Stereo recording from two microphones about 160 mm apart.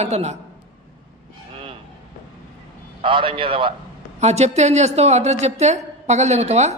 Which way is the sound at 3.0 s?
30° right (ahead or behind).